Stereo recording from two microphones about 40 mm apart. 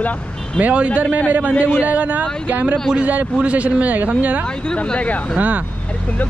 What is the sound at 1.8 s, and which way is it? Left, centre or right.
Speech, right.